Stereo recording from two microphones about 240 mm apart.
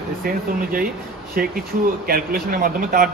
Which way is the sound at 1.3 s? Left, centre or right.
Right.